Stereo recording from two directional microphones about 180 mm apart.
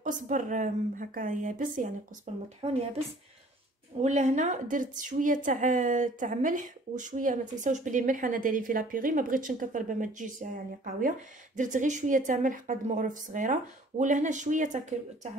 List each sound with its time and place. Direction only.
0.0 s a woman's voice: 45° right (ahead or behind)
4.0 s a woman's voice: 45° right (ahead or behind)